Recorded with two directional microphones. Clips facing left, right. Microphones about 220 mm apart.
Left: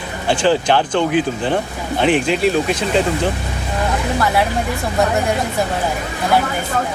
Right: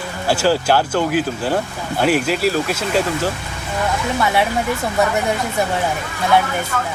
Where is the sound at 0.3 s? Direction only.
5° right (ahead or behind).